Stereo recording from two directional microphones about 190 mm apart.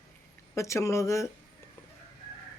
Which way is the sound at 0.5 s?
15° left (ahead or behind).